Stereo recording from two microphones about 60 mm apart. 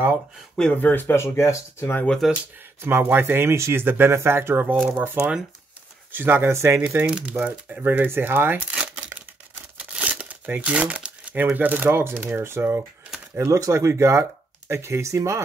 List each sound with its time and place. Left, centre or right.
0.7 s speech: left
1.1 s speech: left
2.2 s speech: centre
2.8 s speech: right
4.9 s speech: right
6.1 s speech: right
7.1 s speech: centre; by 8.6 s right
8.6 s crumpling: centre
11.3 s speech: right
13.4 s speech: right